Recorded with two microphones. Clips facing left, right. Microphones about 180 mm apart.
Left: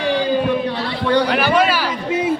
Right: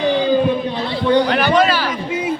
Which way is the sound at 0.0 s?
20° right (ahead or behind).